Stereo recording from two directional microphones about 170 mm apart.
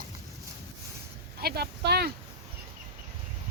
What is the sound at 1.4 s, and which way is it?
Speech, 70° right (ahead or behind).